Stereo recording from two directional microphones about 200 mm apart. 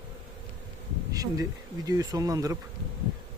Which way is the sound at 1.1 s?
20° right (ahead or behind).